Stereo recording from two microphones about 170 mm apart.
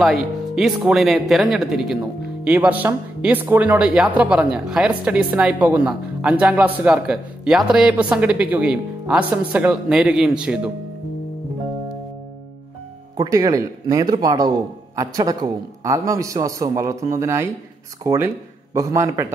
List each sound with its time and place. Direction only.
0.0 s speech: centre (ahead or behind)
13.2 s a man's voice: 20° right (ahead or behind)